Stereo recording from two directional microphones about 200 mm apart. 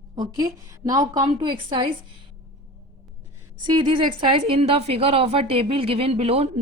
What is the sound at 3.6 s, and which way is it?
A woman's voice, 25° right (ahead or behind).